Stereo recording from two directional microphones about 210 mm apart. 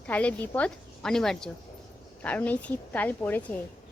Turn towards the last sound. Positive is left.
turn(degrees=10)  # may be behind; listen again after turning